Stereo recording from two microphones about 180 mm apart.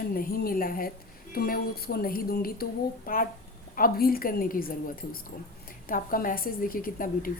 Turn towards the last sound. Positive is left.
turn(degrees=50)  # may be behind; listen again after turning